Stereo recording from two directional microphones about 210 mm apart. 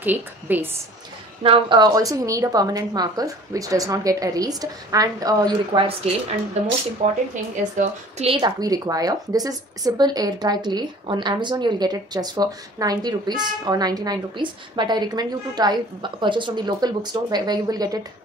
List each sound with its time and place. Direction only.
0.0 s a woman's voice: 10° right (ahead or behind)
1.4 s a woman's voice: 25° right (ahead or behind)
8.2 s a woman's voice: 25° right (ahead or behind)